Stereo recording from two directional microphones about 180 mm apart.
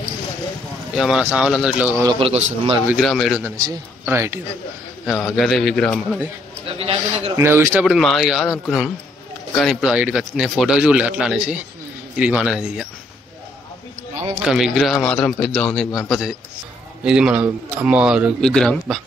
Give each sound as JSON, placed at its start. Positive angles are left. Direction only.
{"t": 0.9, "sound": "speech", "side_deg": -5}
{"t": 2.0, "sound": "a man's voice", "side_deg": -25}
{"t": 3.0, "sound": "speech", "side_deg": 0}
{"t": 3.4, "sound": "speech", "side_deg": -20}
{"t": 5.0, "sound": "speech", "side_deg": 0}
{"t": 6.8, "sound": "a man's voice", "side_deg": -30}
{"t": 7.3, "sound": "speech", "side_deg": -15}
{"t": 7.8, "sound": "speech", "side_deg": 0}
{"t": 14.4, "sound": "speech", "side_deg": -5}